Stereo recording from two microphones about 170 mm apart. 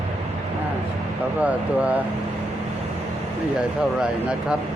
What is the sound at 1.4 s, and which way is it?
Speech, 10° right (ahead or behind).